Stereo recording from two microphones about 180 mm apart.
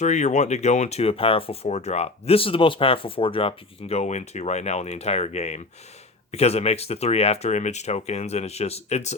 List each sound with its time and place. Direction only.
0.0 s speech: 40° left (ahead or behind)